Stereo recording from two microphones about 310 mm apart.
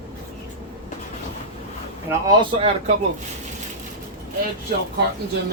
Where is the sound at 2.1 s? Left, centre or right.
Centre.